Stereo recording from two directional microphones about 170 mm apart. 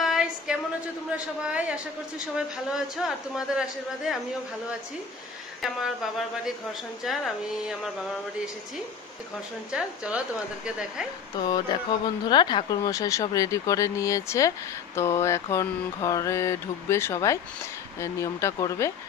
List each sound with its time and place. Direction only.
0.0 s a woman's voice: 5° right (ahead or behind)
5.6 s a woman's voice: centre (ahead or behind)
9.7 s a woman's voice: 5° right (ahead or behind)
11.4 s speech: 25° left (ahead or behind)